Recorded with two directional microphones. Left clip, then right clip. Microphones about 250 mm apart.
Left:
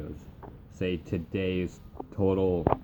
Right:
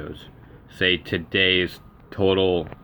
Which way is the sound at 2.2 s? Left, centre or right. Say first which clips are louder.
Right 7 dB; centre.